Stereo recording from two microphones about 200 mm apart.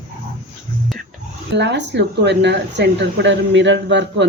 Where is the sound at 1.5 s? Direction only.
60° right (ahead or behind).